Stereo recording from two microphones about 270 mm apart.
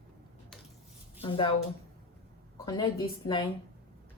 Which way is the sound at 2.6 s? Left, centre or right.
Centre.